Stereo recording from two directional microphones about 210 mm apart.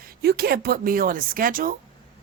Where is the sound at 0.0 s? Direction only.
45° right (ahead or behind).